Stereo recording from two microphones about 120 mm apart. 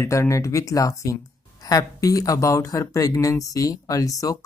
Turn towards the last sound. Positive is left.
turn(degrees=30)  # may be behind; listen again after turning